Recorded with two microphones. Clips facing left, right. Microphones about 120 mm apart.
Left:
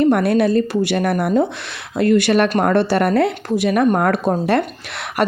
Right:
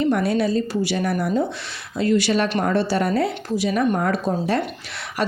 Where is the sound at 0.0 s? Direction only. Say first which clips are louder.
Left 5 dB; 60° left (ahead or behind).